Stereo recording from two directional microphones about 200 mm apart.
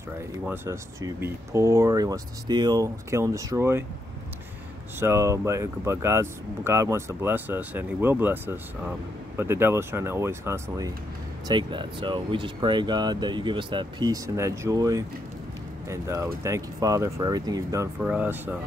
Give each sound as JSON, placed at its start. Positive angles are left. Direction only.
{"t": 0.5, "sound": "speech", "side_deg": -15}
{"t": 5.0, "sound": "speech", "side_deg": -15}
{"t": 11.4, "sound": "speech", "side_deg": -25}